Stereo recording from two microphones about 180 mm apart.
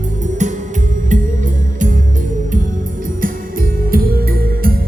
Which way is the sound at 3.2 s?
55° right (ahead or behind).